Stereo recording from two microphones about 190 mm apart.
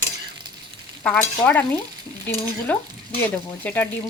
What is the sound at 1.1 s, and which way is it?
Speech, 10° left (ahead or behind).